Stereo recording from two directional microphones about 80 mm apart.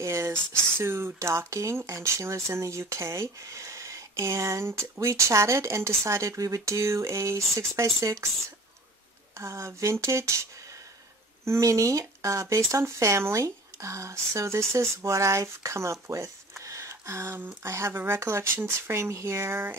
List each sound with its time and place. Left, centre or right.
0.0 s a sound: right
0.5 s speech: right
9.4 s speech: right
11.4 s speech: right